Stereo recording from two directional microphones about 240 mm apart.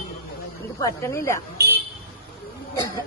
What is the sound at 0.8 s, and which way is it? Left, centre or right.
Speech, centre.